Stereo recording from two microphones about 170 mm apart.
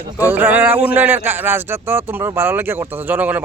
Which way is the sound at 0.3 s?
10° right (ahead or behind).